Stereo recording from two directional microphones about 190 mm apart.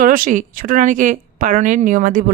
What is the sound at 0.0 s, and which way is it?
A woman's voice, 45° right (ahead or behind).